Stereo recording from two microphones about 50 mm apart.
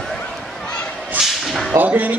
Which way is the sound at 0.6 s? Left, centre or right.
Centre.